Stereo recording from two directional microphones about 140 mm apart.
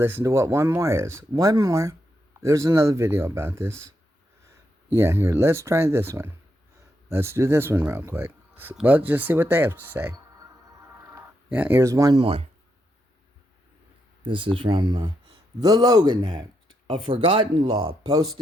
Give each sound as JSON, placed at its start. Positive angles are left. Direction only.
{"t": 0.0, "sound": "speech", "side_deg": -15}
{"t": 4.9, "sound": "speech", "side_deg": -20}
{"t": 12.2, "sound": "speech", "side_deg": -45}
{"t": 14.3, "sound": "speech", "side_deg": -35}
{"t": 16.9, "sound": "speech", "side_deg": -40}